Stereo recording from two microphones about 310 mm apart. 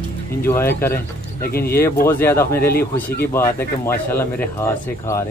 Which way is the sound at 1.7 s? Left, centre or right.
Centre.